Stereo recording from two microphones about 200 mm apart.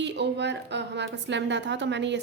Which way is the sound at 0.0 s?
60° right (ahead or behind).